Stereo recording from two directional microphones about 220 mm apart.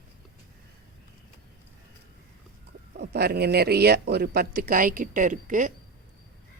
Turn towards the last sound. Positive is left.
turn(degrees=-35)  # may be behind; listen again after turning